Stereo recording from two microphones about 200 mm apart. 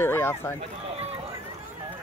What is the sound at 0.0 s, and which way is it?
Speech, 10° left (ahead or behind).